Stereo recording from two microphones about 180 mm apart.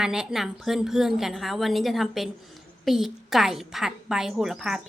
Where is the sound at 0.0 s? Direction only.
5° right (ahead or behind).